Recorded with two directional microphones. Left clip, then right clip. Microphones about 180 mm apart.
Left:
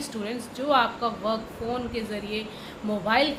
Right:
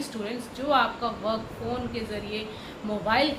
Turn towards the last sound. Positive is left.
turn(degrees=50)  # may be behind; listen again after turning